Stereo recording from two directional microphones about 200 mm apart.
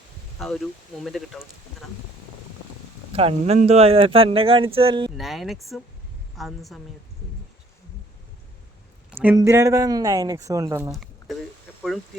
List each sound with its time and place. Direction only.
0.3 s speech: centre (ahead or behind)
3.2 s speech: 30° right (ahead or behind)
5.1 s speech: centre (ahead or behind)
9.0 s speech: 10° right (ahead or behind)
10.9 s a sound: centre (ahead or behind)